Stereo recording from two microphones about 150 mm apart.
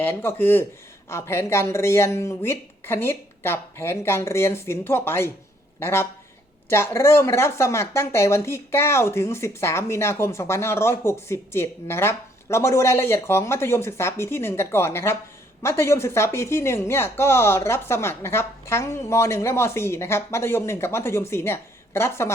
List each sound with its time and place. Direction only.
0.0 s speech: 15° left (ahead or behind)